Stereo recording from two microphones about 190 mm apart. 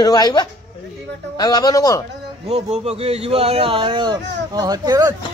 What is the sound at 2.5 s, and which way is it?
Speech, 35° right (ahead or behind).